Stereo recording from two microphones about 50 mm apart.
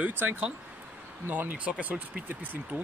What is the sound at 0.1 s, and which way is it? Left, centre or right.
Speech, right.